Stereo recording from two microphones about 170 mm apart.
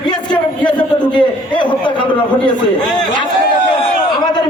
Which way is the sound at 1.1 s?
25° left (ahead or behind).